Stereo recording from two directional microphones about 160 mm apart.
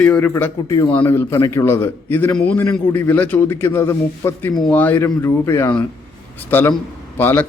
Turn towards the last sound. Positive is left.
turn(degrees=10)  # may be behind; listen again after turning